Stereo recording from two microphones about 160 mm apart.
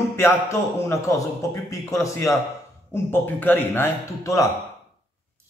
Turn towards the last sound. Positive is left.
turn(degrees=20)  # may be behind; listen again after turning